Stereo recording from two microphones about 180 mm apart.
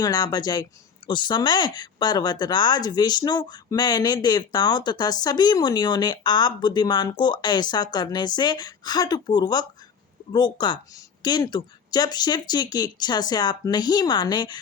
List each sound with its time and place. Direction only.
0.0 s speech: 20° left (ahead or behind)